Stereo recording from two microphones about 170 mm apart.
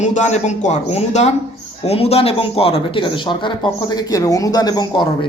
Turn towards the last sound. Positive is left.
turn(degrees=25)  # may be behind; listen again after turning